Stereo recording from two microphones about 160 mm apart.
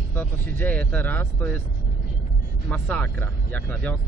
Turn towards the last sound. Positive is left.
turn(degrees=10)  # may be behind; listen again after turning